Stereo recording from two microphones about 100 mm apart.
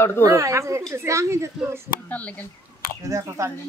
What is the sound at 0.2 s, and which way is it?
Speech, 35° right (ahead or behind).